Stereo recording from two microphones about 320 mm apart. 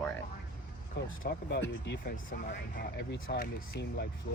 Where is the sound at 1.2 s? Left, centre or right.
Left.